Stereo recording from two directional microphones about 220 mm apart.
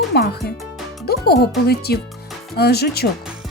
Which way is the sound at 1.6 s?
45° left (ahead or behind).